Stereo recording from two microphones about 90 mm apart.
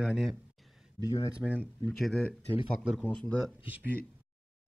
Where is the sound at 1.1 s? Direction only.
40° left (ahead or behind).